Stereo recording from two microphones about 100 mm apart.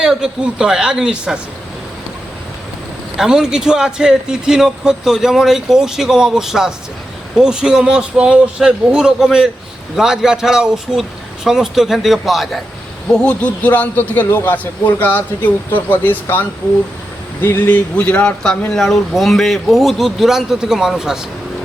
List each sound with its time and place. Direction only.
0.0 s speech: 5° right (ahead or behind)
3.2 s speech: 5° right (ahead or behind)
13.1 s a man's voice: 10° left (ahead or behind); by 21.2 s 5° right (ahead or behind)